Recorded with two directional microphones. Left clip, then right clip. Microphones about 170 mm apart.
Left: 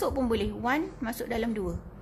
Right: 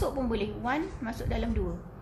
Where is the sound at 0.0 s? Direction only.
55° left (ahead or behind).